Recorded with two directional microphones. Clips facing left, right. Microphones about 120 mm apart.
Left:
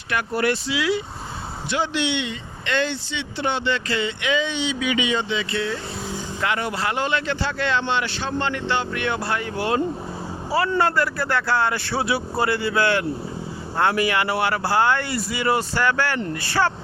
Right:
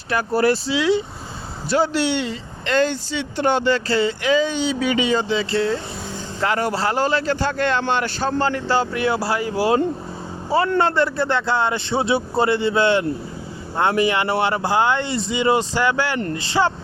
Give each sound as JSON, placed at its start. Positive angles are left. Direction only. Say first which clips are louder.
{"t": 0.1, "sound": "speech", "louder": "right 4 dB", "side_deg": -35}
{"t": 1.7, "sound": "speech", "louder": "right 5 dB", "side_deg": -40}